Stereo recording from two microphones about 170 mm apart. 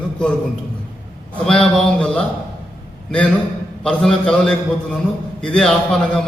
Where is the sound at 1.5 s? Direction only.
5° left (ahead or behind).